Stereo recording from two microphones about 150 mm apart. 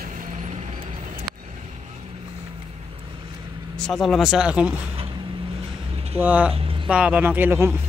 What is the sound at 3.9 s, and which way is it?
Speech, centre (ahead or behind).